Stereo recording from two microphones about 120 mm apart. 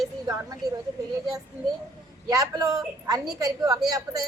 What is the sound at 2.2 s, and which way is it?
A woman's voice, 35° right (ahead or behind).